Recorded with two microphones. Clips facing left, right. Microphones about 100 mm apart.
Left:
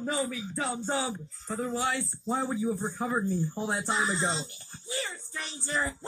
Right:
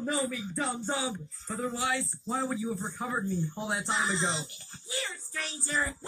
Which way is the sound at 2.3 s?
30° left (ahead or behind).